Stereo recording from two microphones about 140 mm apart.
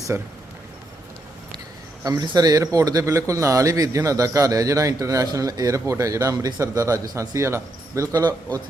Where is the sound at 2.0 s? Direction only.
30° right (ahead or behind).